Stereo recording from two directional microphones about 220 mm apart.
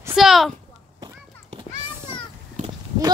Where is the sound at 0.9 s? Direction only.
20° right (ahead or behind).